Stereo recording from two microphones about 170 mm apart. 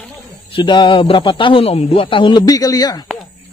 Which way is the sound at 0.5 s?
30° left (ahead or behind).